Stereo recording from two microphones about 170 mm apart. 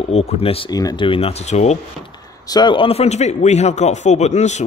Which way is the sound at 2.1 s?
25° left (ahead or behind).